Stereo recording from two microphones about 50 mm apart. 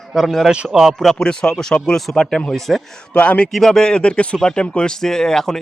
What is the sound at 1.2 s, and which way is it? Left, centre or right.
A man's voice, centre.